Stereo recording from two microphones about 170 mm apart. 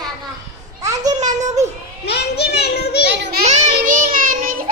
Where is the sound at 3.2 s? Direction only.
65° right (ahead or behind).